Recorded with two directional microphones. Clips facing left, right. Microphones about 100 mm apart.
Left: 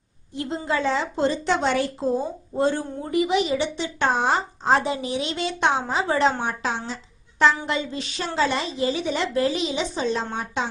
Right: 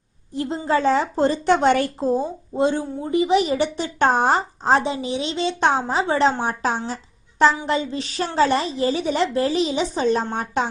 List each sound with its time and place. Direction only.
0.3 s a woman's voice: 35° right (ahead or behind); by 1.9 s 50° right (ahead or behind)
2.6 s a woman's voice: 20° right (ahead or behind)
3.2 s a woman's voice: 35° right (ahead or behind)
4.8 s a woman's voice: 25° right (ahead or behind); by 10.7 s 45° right (ahead or behind)